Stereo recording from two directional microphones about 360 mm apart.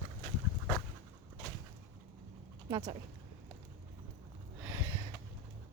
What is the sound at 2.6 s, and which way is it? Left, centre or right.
Speech, centre.